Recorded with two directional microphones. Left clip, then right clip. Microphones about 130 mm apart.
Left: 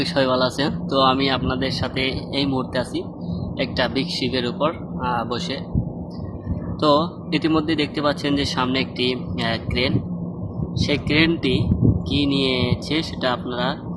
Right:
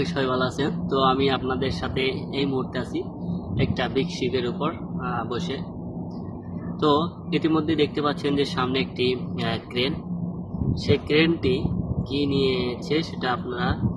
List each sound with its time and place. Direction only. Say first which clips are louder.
0.0 s speech: left 5 dB; 30° left (ahead or behind)
6.8 s speech: left 4 dB; 25° left (ahead or behind)